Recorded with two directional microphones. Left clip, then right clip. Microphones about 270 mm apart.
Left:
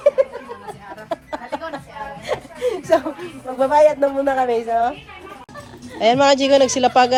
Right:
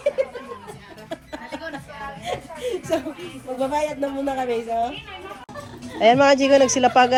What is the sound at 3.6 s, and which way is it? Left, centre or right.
Speech, centre.